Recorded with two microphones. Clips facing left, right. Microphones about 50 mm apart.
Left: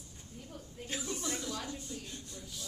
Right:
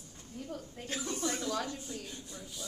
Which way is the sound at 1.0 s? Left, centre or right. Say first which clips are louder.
Right 5 dB; right.